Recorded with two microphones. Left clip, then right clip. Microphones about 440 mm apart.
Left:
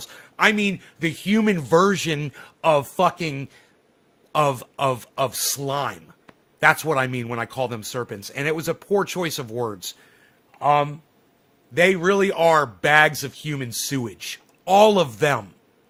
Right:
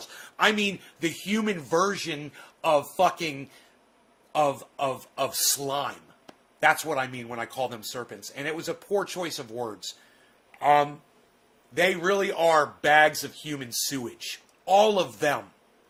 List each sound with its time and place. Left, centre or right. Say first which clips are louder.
0.3 s speech: left 4 dB; left
10.6 s speech: left 2 dB; left